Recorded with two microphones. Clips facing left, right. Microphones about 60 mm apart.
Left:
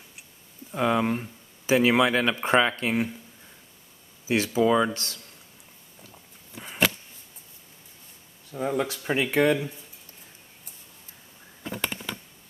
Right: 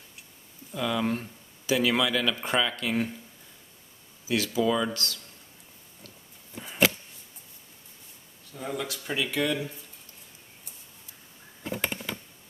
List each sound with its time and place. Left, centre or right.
0.7 s speech: left
1.0 s speech: centre
1.7 s speech: left
4.3 s speech: left
6.6 s a sound: centre
8.5 s speech: left